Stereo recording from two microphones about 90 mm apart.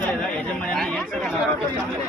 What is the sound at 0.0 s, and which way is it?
Chatter, 15° left (ahead or behind).